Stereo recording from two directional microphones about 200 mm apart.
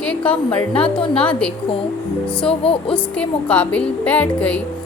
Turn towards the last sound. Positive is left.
turn(degrees=5)  # may be behind; listen again after turning